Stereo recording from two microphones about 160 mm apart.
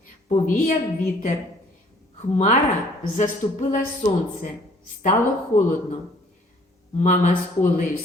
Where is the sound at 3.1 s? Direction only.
50° left (ahead or behind).